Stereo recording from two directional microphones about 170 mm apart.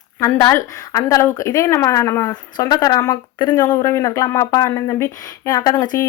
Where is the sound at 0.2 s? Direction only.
15° left (ahead or behind).